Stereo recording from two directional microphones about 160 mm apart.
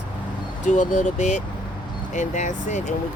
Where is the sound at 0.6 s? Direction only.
50° left (ahead or behind).